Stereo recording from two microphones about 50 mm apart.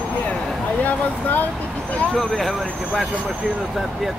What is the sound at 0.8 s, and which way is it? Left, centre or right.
Speech, left.